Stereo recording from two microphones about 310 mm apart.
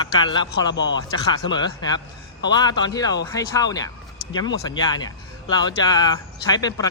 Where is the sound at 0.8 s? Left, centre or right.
Left.